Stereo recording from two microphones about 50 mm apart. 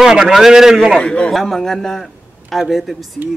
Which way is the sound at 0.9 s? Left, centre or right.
Centre.